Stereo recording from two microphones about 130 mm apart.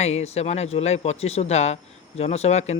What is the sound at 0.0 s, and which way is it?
Speech, 55° left (ahead or behind).